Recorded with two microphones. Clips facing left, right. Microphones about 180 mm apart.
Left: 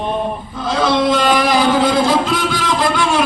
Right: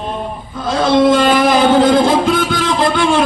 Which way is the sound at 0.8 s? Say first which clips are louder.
Right 4 dB; 50° right (ahead or behind).